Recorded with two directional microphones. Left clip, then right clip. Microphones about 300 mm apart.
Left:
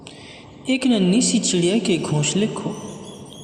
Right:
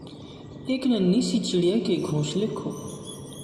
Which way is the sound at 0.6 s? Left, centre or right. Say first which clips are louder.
Left 5 dB; left.